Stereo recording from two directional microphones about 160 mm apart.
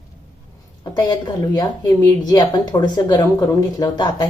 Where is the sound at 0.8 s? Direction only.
25° left (ahead or behind).